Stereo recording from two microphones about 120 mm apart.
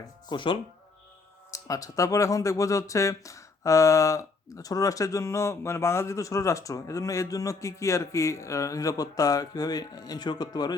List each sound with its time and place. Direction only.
0.3 s speech: 45° left (ahead or behind)
1.5 s speech: 30° left (ahead or behind)